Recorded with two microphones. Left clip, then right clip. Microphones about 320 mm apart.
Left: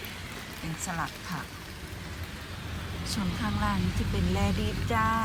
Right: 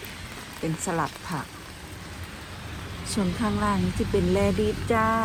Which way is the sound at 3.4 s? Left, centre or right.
Centre.